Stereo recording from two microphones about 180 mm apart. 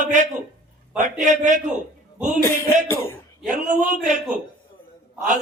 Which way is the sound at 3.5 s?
45° right (ahead or behind).